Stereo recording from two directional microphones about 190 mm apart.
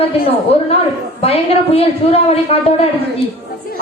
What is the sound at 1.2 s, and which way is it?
A man's voice, 30° left (ahead or behind).